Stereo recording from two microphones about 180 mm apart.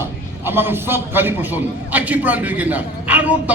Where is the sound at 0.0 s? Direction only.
10° right (ahead or behind).